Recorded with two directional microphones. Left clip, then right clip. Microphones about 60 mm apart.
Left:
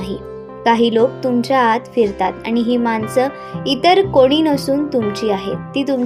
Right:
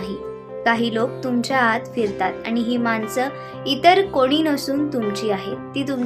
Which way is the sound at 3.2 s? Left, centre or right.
Left.